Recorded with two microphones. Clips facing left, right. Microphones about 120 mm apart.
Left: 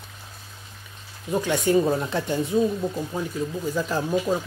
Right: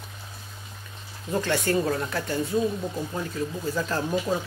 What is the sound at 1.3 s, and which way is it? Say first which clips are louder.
Speech: left 4 dB; 15° left (ahead or behind).